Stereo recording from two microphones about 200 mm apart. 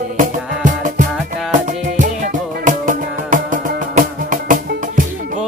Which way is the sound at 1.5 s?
40° right (ahead or behind).